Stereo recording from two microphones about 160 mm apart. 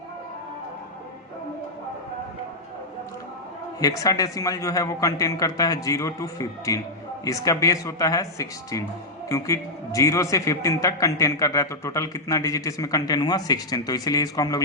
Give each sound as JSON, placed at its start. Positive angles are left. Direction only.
{"t": 3.8, "sound": "a man's voice", "side_deg": 20}